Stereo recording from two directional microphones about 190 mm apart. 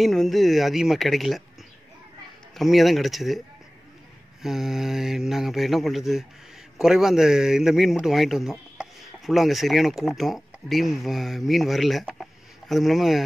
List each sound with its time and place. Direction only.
0.0 s a man's voice: centre (ahead or behind)
2.5 s a man's voice: centre (ahead or behind)